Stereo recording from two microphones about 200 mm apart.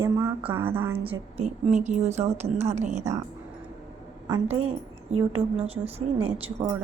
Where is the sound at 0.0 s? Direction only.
15° right (ahead or behind).